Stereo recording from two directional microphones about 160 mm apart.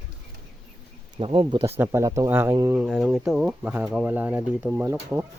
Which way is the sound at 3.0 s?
Centre (ahead or behind).